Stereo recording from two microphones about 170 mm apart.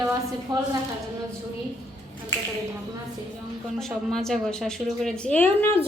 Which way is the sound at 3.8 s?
Centre (ahead or behind).